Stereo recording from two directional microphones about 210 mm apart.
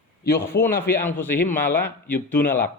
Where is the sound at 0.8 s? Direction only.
10° left (ahead or behind).